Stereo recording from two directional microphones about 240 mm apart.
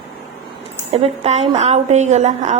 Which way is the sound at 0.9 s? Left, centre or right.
Right.